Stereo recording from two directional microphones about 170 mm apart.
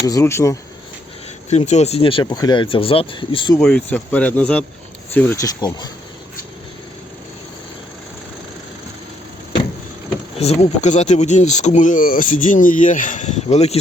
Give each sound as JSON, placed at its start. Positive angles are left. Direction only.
{"t": 0.0, "sound": "speech", "side_deg": 20}
{"t": 1.5, "sound": "speech", "side_deg": 40}
{"t": 3.6, "sound": "speech", "side_deg": 5}
{"t": 5.5, "sound": "speech", "side_deg": 25}
{"t": 10.3, "sound": "speech", "side_deg": 40}